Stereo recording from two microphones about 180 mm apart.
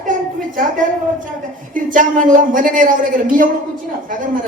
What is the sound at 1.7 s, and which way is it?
A woman's voice, 45° right (ahead or behind).